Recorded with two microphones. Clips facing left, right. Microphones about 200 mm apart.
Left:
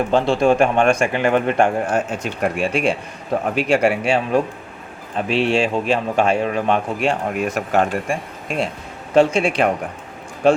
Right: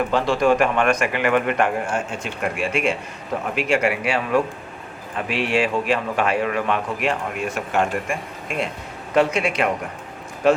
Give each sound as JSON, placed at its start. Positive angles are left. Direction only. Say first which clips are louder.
{"t": 0.1, "sound": "a man's voice", "louder": "left 4 dB", "side_deg": 25}